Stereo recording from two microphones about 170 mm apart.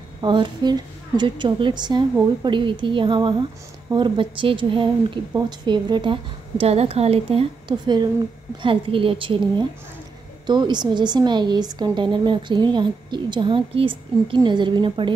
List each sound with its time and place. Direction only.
0.2 s a woman's voice: 25° right (ahead or behind)